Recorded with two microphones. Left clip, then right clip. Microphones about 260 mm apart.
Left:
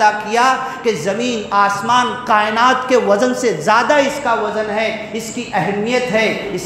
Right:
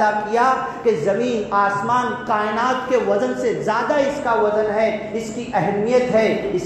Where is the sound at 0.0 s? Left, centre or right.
Left.